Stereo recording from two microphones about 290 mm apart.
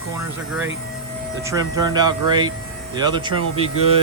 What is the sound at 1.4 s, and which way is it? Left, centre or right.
Speech, centre.